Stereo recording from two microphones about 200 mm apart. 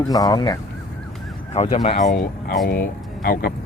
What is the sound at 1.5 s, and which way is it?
Speech, 35° left (ahead or behind).